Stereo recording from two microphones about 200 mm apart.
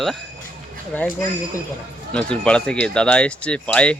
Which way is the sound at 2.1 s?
5° left (ahead or behind).